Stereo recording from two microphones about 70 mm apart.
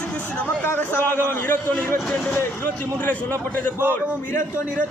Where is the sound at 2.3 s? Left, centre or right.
Left.